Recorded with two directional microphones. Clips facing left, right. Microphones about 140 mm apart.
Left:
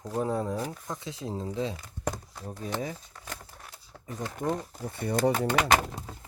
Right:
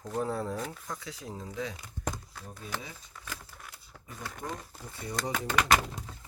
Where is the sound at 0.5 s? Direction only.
35° left (ahead or behind).